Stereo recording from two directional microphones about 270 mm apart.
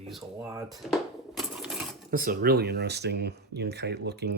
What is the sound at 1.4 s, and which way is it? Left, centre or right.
Coin, centre.